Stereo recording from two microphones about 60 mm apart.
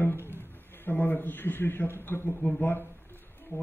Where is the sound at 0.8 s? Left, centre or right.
Left.